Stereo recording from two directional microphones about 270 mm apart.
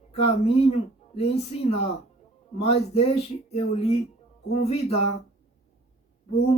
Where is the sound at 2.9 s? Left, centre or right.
Left.